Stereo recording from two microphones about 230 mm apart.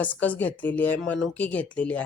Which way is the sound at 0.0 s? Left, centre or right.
Centre.